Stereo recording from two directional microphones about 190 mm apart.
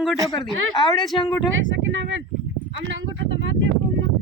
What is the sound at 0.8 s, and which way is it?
Speech, 25° left (ahead or behind).